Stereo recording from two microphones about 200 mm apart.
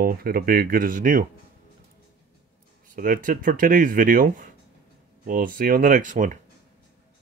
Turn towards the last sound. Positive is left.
turn(degrees=-40)  # may be behind; listen again after turning